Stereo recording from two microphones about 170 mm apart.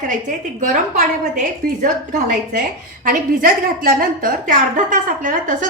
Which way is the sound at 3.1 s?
55° right (ahead or behind).